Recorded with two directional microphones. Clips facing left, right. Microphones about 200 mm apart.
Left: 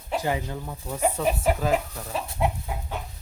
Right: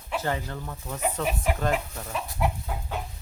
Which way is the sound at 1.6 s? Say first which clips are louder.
Left 2 dB; 5° left (ahead or behind).